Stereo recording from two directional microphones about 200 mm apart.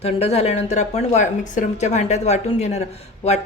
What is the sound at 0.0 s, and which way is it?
Speech, 30° left (ahead or behind).